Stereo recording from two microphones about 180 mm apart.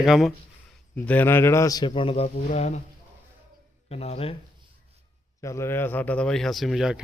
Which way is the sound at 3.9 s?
35° left (ahead or behind).